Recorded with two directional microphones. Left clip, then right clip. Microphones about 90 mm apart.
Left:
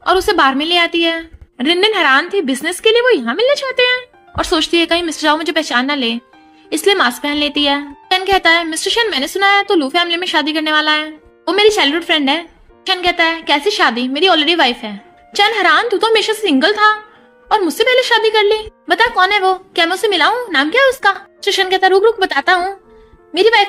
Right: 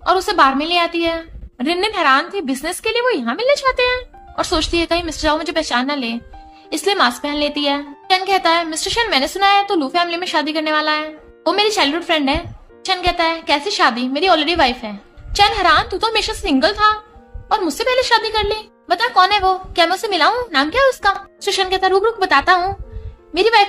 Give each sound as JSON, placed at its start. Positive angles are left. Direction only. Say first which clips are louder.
{"t": 0.0, "sound": "speech", "louder": "left 2 dB", "side_deg": 40}
{"t": 23.3, "sound": "speech", "louder": "left 2 dB", "side_deg": 30}